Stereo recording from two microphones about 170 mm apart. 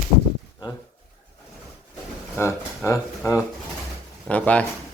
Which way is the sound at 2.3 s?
15° left (ahead or behind).